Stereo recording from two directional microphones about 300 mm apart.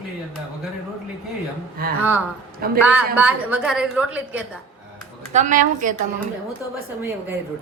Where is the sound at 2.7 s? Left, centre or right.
Centre.